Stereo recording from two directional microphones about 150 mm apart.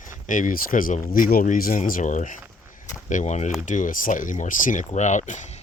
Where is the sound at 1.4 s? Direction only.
65° left (ahead or behind).